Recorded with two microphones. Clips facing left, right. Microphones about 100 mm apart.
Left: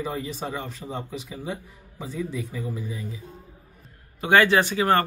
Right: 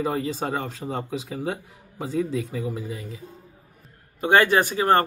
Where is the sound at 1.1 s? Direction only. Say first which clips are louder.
Right 4 dB; 70° right (ahead or behind).